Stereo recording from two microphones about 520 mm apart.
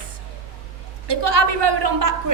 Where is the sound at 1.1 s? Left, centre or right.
Right.